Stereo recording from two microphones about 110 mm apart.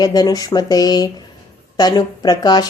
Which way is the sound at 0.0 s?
35° left (ahead or behind).